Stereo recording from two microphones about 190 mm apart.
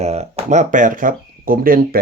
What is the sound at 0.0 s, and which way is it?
Speech, 35° right (ahead or behind).